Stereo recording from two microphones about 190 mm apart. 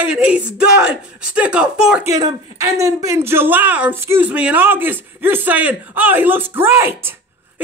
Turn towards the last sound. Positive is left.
turn(degrees=-10)  # may be behind; listen again after turning